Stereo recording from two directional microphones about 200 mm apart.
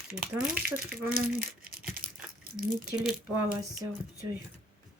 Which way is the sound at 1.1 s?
45° right (ahead or behind).